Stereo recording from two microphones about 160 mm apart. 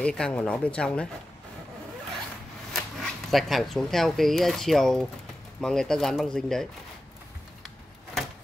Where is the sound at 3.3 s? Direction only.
Centre (ahead or behind).